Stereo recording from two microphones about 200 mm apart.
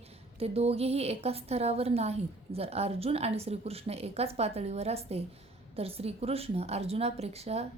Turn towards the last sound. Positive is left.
turn(degrees=-30)  # may be behind; listen again after turning